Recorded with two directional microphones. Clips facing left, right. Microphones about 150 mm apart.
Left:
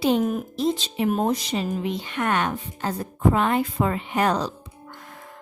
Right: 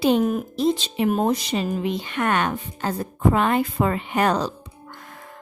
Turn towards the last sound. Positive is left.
turn(degrees=-65)  # may be behind; listen again after turning